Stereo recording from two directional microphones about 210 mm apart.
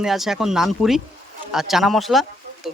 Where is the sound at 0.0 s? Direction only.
Centre (ahead or behind).